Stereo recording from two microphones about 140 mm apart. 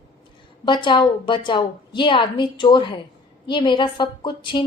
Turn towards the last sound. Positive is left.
turn(degrees=35)  # may be behind; listen again after turning